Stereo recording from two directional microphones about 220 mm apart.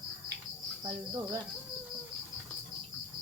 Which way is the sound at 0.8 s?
15° right (ahead or behind).